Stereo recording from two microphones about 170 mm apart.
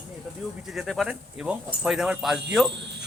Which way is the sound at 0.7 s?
Centre (ahead or behind).